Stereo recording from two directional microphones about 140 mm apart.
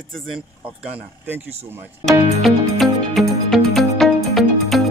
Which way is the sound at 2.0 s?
Centre (ahead or behind).